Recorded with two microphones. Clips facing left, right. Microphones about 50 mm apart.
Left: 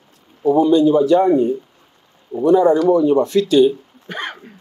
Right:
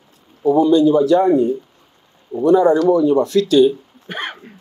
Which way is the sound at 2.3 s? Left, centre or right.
Left.